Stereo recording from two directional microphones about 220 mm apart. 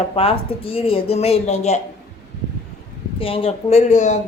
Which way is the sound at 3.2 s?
25° left (ahead or behind).